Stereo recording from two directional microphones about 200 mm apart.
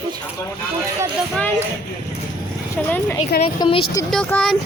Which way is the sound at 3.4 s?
25° left (ahead or behind).